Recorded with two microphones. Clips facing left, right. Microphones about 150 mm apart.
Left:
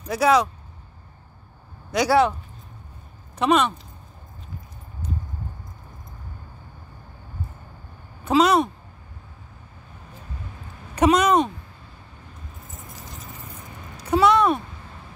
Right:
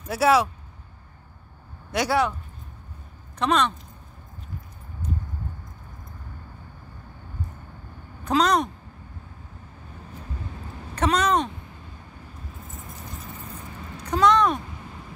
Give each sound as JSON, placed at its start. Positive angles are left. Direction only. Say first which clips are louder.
{"t": 0.0, "sound": "speech", "louder": "left 1 dB", "side_deg": -5}
{"t": 1.9, "sound": "speech", "louder": "left 4 dB", "side_deg": -5}
{"t": 3.3, "sound": "speech", "louder": "left 3 dB", "side_deg": 5}
{"t": 5.0, "sound": "a sound", "louder": "right 1 dB", "side_deg": 90}
{"t": 8.3, "sound": "speech", "louder": "left 3 dB", "side_deg": 5}
{"t": 11.0, "sound": "speech", "louder": "left 5 dB", "side_deg": 10}
{"t": 14.0, "sound": "a sound", "louder": "left 2 dB", "side_deg": 10}